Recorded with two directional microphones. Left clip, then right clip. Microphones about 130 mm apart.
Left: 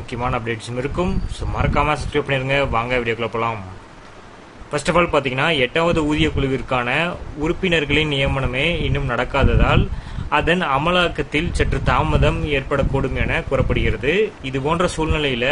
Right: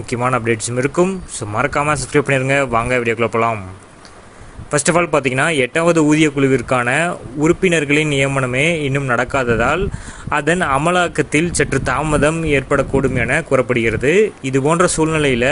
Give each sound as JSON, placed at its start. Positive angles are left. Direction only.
{"t": 0.1, "sound": "a man's voice", "side_deg": -40}
{"t": 4.6, "sound": "a man's voice", "side_deg": -45}